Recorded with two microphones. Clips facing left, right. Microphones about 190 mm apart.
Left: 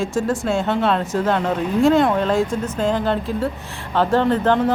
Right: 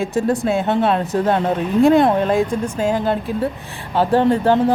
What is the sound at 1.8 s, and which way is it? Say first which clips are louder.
A woman's voice: right 2 dB; 20° right (ahead or behind).